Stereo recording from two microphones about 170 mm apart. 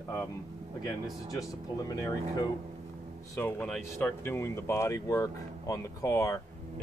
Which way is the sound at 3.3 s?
10° left (ahead or behind).